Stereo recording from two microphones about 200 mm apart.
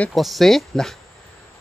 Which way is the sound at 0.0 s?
Centre (ahead or behind).